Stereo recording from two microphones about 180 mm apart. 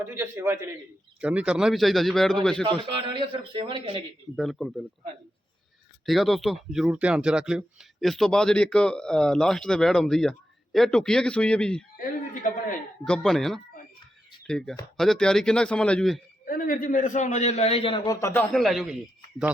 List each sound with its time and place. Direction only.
0.0 s a man's voice: 10° right (ahead or behind); by 2.6 s 5° left (ahead or behind)
3.1 s speech: 25° right (ahead or behind)
4.4 s speech: centre (ahead or behind)
6.1 s speech: centre (ahead or behind)
11.9 s speech: 45° left (ahead or behind)
13.1 s speech: 5° left (ahead or behind)
16.5 s a man's voice: 50° left (ahead or behind); by 18.9 s centre (ahead or behind)